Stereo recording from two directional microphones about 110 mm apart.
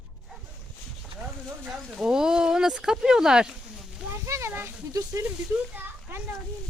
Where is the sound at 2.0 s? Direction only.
5° right (ahead or behind).